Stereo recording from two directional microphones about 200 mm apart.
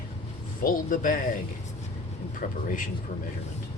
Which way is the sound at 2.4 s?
40° left (ahead or behind).